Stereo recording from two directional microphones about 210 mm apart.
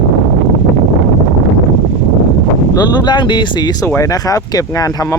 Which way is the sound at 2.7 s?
20° left (ahead or behind).